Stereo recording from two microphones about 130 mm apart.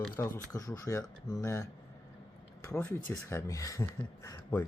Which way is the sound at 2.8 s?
10° left (ahead or behind).